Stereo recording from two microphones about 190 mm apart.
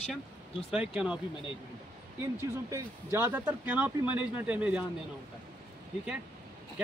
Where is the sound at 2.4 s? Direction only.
15° right (ahead or behind).